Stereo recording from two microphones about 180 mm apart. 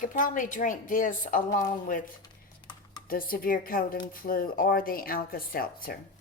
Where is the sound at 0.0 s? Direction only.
45° left (ahead or behind).